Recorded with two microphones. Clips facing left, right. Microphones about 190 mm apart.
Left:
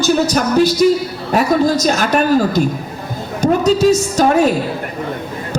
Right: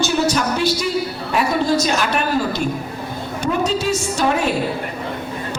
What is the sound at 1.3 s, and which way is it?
A woman's voice, 40° left (ahead or behind).